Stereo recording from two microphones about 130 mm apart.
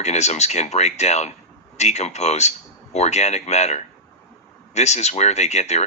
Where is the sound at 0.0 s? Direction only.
60° left (ahead or behind).